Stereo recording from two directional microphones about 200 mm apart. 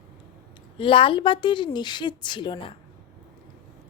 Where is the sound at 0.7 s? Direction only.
25° left (ahead or behind).